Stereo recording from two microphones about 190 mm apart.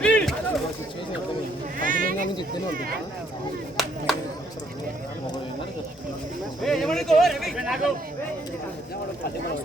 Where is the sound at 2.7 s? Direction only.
50° right (ahead or behind).